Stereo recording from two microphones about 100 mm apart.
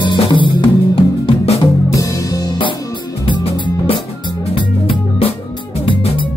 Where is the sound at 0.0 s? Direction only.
50° left (ahead or behind); by 1.6 s 70° left (ahead or behind).